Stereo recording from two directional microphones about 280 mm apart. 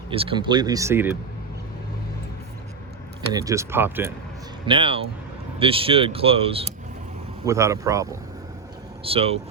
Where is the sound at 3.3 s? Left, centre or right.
Centre.